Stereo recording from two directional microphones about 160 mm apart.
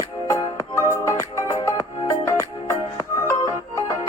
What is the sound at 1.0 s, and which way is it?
Music, 20° left (ahead or behind).